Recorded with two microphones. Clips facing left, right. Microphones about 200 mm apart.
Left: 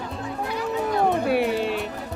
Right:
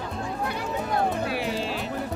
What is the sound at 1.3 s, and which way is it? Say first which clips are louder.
Music: left 6 dB; 60° left (ahead or behind).